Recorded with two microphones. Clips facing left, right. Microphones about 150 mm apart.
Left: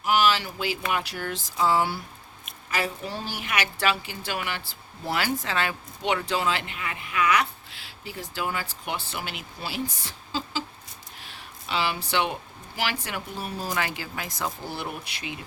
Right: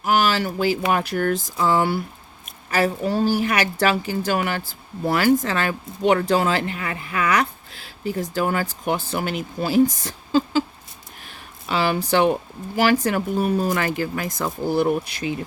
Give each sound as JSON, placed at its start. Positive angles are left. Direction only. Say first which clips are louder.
{"t": 0.0, "sound": "a woman's voice", "louder": "right 3 dB", "side_deg": -45}